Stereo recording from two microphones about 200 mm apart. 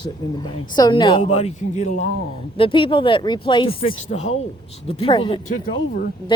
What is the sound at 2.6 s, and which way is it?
A man's voice, 25° left (ahead or behind).